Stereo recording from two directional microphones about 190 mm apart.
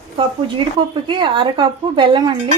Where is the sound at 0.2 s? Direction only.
25° right (ahead or behind).